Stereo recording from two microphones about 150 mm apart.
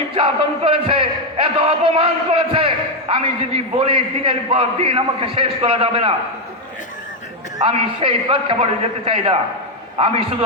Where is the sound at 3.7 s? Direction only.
40° right (ahead or behind).